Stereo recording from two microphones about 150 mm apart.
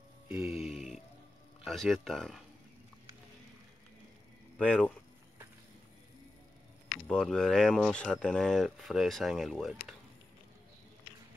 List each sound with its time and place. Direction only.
0.3 s music: 5° right (ahead or behind)
1.6 s speech: centre (ahead or behind)
4.6 s speech: 10° left (ahead or behind)
7.1 s speech: 5° left (ahead or behind)